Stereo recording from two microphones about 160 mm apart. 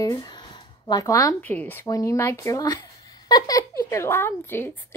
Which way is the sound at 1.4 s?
10° left (ahead or behind).